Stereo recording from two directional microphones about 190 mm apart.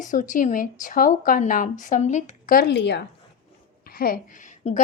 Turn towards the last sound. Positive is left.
turn(degrees=35)  # may be behind; listen again after turning